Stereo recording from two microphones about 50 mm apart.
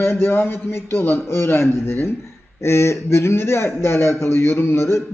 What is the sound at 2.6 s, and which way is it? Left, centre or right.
A man's voice, left.